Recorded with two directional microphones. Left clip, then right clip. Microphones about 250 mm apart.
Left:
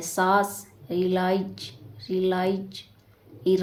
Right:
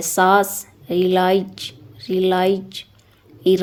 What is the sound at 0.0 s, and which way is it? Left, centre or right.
A woman's voice, right.